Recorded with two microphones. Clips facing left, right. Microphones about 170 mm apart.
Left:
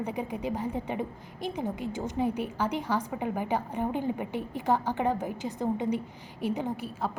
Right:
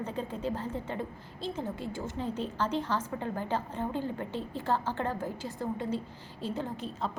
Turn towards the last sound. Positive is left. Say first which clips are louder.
# left 3 dB
turn(degrees=10)  # may be behind; listen again after turning